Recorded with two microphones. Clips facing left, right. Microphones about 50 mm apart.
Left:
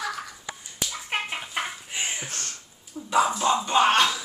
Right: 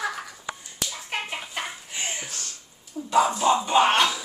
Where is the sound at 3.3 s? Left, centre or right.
Centre.